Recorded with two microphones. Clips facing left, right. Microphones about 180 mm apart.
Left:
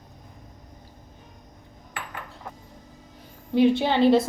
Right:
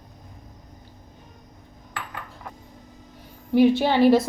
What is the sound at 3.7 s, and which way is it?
Speech, 20° left (ahead or behind).